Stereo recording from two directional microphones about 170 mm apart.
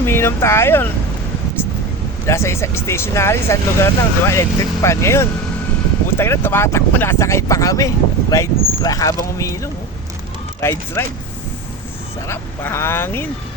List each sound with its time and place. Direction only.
0.0 s speech: 15° left (ahead or behind)
2.2 s speech: 15° left (ahead or behind)
12.3 s speech: 15° left (ahead or behind)